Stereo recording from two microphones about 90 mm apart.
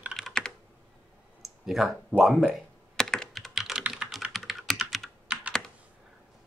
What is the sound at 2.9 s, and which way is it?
Computer keyboard, 5° left (ahead or behind).